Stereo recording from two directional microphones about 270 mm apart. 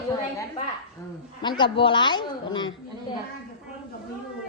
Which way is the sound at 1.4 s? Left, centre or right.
Centre.